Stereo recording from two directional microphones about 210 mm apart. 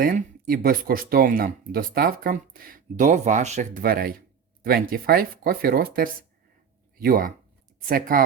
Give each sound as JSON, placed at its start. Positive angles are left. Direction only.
{"t": 0.0, "sound": "speech", "side_deg": -45}